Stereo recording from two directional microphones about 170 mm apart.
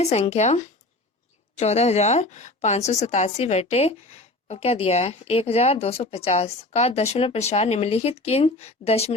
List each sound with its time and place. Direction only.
0.0 s a woman's voice: 40° left (ahead or behind)